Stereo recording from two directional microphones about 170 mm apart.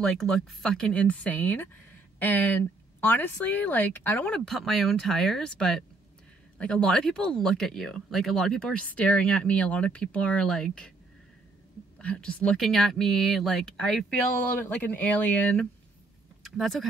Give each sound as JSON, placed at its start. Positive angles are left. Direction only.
{"t": 0.0, "sound": "speech", "side_deg": 0}
{"t": 12.0, "sound": "speech", "side_deg": 5}